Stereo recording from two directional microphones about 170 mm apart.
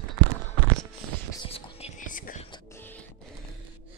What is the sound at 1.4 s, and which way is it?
Whispering, 35° left (ahead or behind).